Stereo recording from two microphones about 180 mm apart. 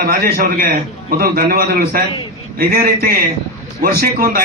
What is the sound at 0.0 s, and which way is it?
A man's voice, 55° right (ahead or behind).